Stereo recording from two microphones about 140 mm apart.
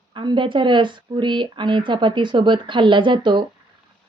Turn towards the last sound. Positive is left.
turn(degrees=-35)  # may be behind; listen again after turning